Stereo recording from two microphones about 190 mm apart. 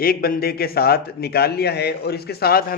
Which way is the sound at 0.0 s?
50° left (ahead or behind).